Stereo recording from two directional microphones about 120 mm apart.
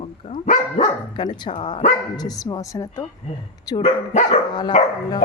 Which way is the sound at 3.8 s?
75° left (ahead or behind).